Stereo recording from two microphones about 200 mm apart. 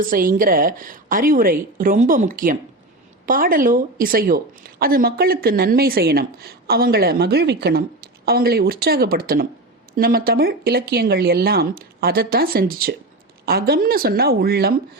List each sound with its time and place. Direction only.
0.1 s a woman's voice: 45° right (ahead or behind)